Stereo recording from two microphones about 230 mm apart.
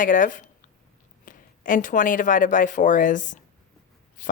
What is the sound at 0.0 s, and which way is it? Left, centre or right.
Speech, left.